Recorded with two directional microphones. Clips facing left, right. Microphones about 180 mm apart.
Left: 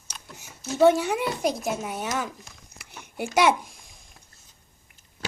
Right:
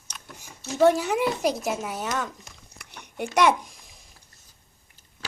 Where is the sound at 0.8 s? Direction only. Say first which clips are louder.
Even; centre (ahead or behind).